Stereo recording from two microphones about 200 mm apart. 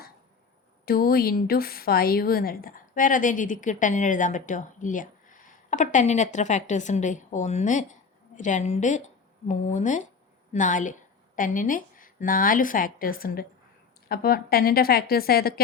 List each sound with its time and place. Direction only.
0.9 s a woman's voice: 50° left (ahead or behind)